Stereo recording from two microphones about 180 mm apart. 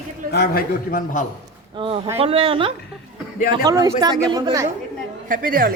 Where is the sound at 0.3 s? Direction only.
60° left (ahead or behind).